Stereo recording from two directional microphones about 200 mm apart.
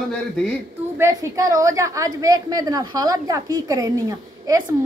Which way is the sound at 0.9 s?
15° right (ahead or behind).